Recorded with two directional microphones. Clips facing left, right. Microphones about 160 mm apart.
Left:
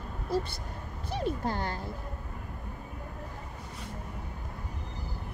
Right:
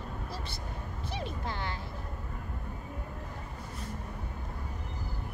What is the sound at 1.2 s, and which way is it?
Speech, 45° left (ahead or behind).